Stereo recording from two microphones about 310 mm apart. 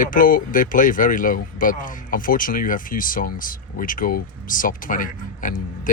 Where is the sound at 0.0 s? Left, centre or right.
Left.